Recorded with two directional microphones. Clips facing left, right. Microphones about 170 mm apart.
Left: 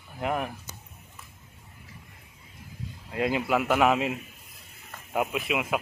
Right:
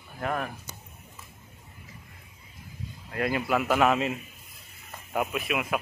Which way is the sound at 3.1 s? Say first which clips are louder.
Left 1 dB; 20° left (ahead or behind).